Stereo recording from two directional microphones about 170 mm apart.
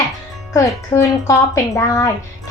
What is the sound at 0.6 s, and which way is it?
A child's voice, 20° left (ahead or behind).